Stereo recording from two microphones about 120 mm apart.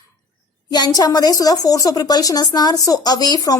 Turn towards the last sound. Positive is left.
turn(degrees=35)  # may be behind; listen again after turning